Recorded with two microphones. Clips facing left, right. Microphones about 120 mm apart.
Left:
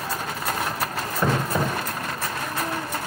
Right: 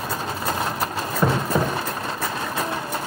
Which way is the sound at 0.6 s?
20° right (ahead or behind).